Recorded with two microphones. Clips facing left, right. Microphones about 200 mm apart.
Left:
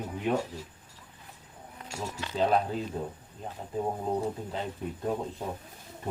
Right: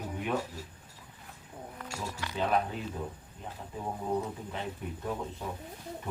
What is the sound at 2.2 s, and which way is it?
Speech, 30° left (ahead or behind).